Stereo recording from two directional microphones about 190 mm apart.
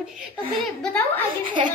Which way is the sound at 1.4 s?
25° right (ahead or behind).